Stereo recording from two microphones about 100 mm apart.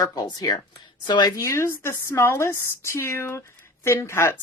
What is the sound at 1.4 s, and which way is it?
Speech, 30° left (ahead or behind).